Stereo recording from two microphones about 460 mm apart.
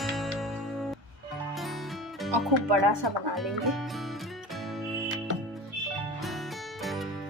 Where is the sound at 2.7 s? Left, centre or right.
Right.